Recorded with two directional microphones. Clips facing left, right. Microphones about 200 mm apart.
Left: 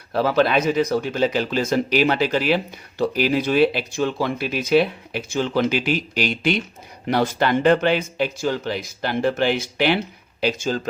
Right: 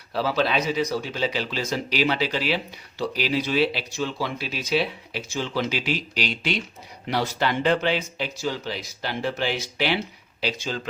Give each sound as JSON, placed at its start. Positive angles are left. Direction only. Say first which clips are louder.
{"t": 0.1, "sound": "speech", "louder": "left 5 dB", "side_deg": 50}